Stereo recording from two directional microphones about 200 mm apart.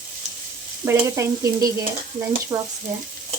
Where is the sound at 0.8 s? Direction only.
15° right (ahead or behind).